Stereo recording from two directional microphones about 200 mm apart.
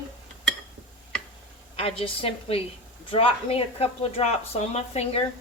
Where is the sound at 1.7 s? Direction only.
30° left (ahead or behind).